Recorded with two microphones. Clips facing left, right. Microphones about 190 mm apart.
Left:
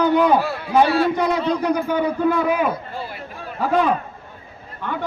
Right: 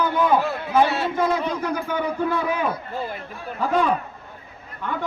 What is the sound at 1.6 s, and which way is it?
Speech, 15° left (ahead or behind).